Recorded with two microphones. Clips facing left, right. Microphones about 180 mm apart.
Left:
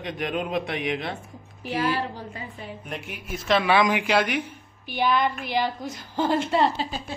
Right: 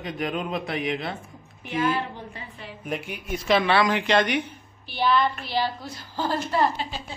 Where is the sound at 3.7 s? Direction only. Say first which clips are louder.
Even; 15° left (ahead or behind).